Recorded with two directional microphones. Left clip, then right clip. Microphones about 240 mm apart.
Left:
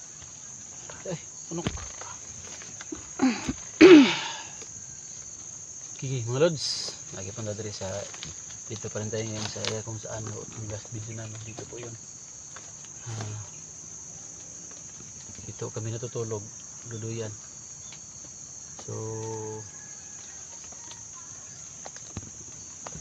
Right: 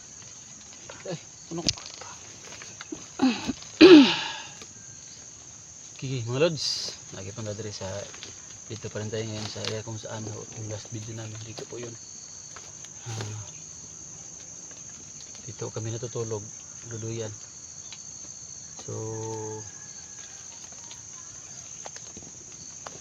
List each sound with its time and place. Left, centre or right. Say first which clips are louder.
1.0 s cricket: even; centre
3.2 s a sound: right 1 dB; centre
6.0 s speech: even; centre
9.7 s speech: even; left
15.6 s speech: right 1 dB; centre